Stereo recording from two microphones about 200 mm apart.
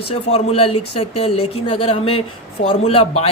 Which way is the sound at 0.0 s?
30° left (ahead or behind).